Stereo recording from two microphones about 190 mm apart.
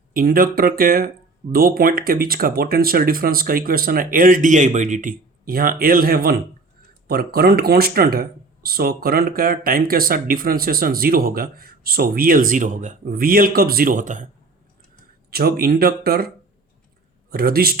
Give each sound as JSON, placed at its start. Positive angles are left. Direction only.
{"t": 0.1, "sound": "speech", "side_deg": -50}
{"t": 15.3, "sound": "speech", "side_deg": -55}
{"t": 17.3, "sound": "speech", "side_deg": -50}